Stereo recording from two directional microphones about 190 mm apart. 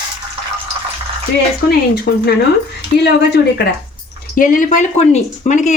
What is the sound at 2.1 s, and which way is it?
Speech, 65° left (ahead or behind).